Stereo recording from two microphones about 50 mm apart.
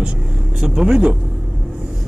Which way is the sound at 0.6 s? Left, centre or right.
Centre.